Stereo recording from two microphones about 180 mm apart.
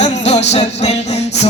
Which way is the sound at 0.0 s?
35° left (ahead or behind).